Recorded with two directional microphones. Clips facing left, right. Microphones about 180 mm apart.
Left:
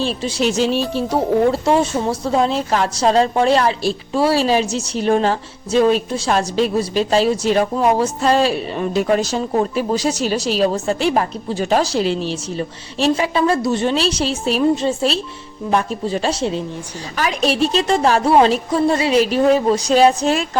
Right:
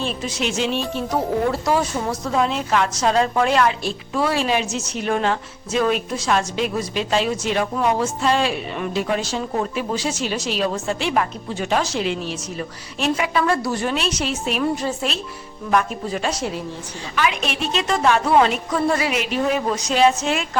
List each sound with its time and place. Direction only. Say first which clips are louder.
0.0 s a woman's voice: left 5 dB; 30° left (ahead or behind)
17.2 s a woman's voice: left 5 dB; 35° left (ahead or behind)